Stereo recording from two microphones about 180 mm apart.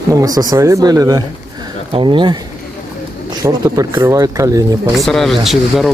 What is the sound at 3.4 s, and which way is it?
Speech, 20° right (ahead or behind).